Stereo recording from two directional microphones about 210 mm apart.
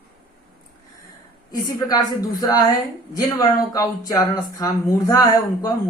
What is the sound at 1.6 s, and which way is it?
Speech, 20° left (ahead or behind).